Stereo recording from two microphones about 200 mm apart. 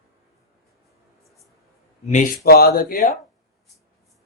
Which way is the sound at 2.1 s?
45° left (ahead or behind).